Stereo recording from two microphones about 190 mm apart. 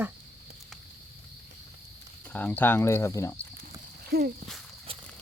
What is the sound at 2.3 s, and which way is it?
Speech, 10° left (ahead or behind).